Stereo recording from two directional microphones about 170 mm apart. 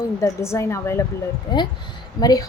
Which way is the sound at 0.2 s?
15° left (ahead or behind).